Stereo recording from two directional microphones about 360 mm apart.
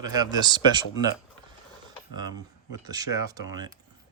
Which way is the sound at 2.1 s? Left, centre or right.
Centre.